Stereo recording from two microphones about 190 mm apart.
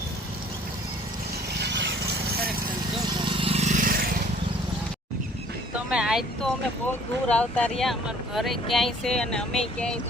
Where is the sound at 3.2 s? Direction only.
30° right (ahead or behind); by 4.1 s 50° right (ahead or behind).